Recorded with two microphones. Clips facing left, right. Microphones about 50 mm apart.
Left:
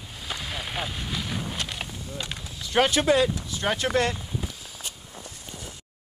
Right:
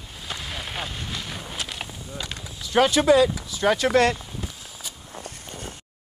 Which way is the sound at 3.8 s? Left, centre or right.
Right.